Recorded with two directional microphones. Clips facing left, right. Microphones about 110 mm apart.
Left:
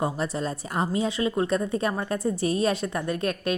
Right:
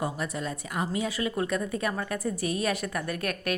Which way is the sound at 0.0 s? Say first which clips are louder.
Left 4 dB; 30° left (ahead or behind).